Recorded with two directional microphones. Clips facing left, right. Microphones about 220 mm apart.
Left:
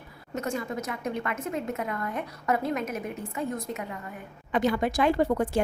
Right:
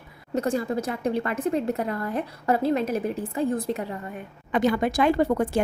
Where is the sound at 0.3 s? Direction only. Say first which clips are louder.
Right 6 dB; 35° right (ahead or behind).